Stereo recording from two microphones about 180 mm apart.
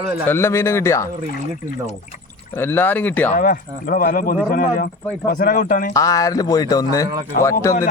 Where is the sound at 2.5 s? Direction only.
10° left (ahead or behind).